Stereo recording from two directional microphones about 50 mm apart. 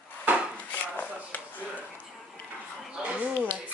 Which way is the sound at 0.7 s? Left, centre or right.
Left.